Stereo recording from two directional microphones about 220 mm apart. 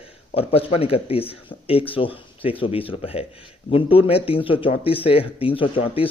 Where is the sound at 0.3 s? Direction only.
25° left (ahead or behind).